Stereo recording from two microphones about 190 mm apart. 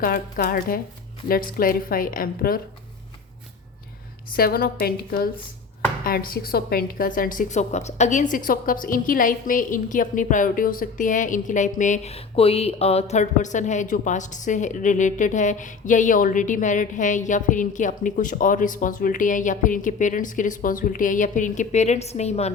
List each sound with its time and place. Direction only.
0.0 s a woman's voice: 45° left (ahead or behind)
4.3 s a woman's voice: 50° left (ahead or behind); by 22.5 s 35° left (ahead or behind)